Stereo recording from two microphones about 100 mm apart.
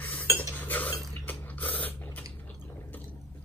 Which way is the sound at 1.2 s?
15° left (ahead or behind).